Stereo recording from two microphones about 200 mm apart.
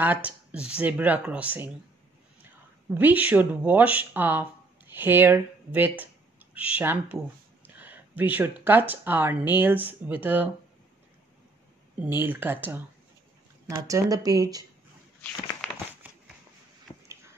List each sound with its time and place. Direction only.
0.0 s speech: 5° right (ahead or behind)
2.9 s speech: 10° right (ahead or behind)
12.2 s speech: 10° right (ahead or behind)
16.0 s a sound: 10° right (ahead or behind)